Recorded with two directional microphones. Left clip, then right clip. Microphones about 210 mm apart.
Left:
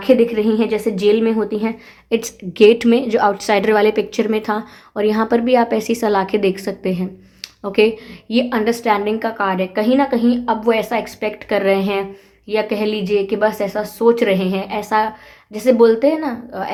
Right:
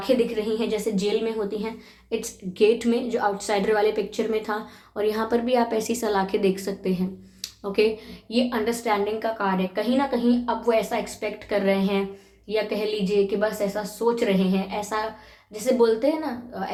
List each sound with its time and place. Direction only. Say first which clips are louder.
0.0 s a woman's voice: left 9 dB; 45° left (ahead or behind)